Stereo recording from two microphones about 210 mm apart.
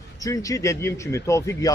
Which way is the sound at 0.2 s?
15° left (ahead or behind).